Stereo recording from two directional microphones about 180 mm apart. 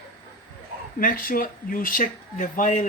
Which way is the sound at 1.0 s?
50° left (ahead or behind).